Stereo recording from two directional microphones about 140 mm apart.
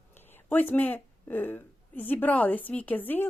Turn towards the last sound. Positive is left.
turn(degrees=15)  # may be behind; listen again after turning